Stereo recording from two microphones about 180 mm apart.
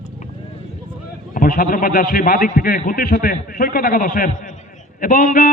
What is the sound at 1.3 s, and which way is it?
A man's voice, 50° left (ahead or behind).